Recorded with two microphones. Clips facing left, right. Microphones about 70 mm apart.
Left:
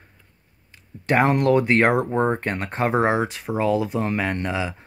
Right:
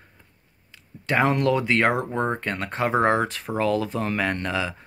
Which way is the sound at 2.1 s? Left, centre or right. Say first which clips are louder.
Left 4 dB; left.